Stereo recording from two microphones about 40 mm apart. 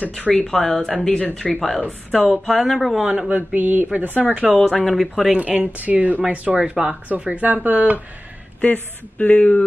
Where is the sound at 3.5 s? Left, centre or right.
Right.